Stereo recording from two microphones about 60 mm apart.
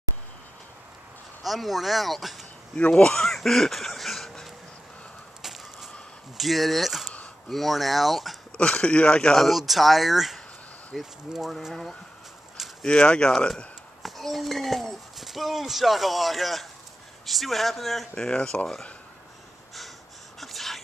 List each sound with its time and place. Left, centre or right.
1.4 s speech: centre
2.7 s speech: centre
3.3 s a sound: centre
6.3 s speech: centre
8.5 s speech: centre
12.8 s speech: centre
14.0 s speech: centre
20.3 s a sound: centre